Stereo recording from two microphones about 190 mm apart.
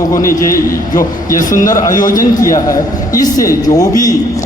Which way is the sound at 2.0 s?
45° left (ahead or behind).